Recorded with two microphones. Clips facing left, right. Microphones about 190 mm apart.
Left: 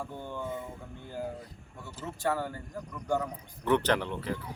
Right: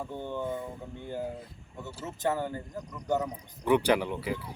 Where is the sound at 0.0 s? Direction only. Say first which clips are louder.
Right 3 dB; 20° right (ahead or behind).